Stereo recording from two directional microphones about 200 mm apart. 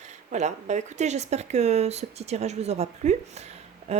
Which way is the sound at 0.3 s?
35° right (ahead or behind).